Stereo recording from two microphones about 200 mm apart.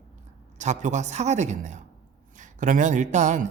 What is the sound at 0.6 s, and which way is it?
Speech, 35° right (ahead or behind).